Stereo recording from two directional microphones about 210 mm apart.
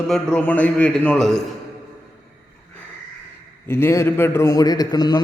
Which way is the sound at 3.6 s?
10° left (ahead or behind).